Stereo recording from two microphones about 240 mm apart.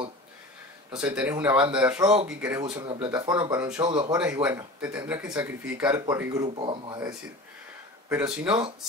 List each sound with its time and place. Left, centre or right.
0.9 s speech: centre
2.2 s speech: centre
4.2 s speech: centre